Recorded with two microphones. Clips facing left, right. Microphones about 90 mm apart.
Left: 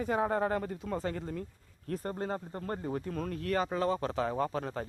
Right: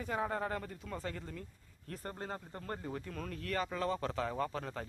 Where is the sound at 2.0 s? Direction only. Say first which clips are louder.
Left 6 dB; 30° left (ahead or behind).